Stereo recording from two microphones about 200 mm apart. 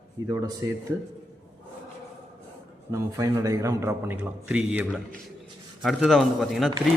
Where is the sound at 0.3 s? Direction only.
20° right (ahead or behind).